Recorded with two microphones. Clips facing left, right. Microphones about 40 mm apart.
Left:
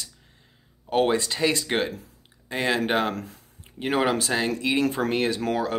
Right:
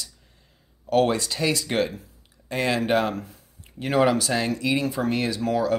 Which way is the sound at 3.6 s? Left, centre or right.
Left.